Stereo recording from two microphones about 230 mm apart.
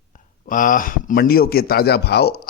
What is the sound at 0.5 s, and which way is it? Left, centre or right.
Speech, left.